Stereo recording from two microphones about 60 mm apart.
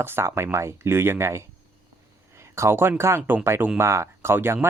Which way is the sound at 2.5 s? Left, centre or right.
Right.